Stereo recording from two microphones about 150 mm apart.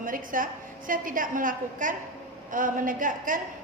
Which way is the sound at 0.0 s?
65° right (ahead or behind).